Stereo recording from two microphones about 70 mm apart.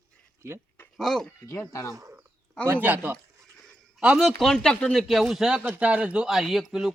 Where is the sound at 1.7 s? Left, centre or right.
Left.